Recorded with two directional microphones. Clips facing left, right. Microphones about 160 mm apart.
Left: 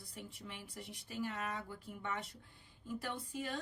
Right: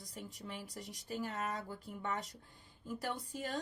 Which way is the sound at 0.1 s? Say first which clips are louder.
Right 3 dB; 40° right (ahead or behind).